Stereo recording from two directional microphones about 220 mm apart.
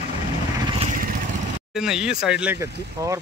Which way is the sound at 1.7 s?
5° right (ahead or behind).